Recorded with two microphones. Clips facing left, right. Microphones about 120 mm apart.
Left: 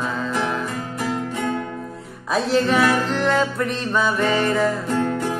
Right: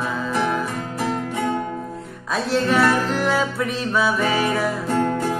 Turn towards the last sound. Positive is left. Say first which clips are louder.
# left 1 dB
turn(degrees=-10)  # may be behind; listen again after turning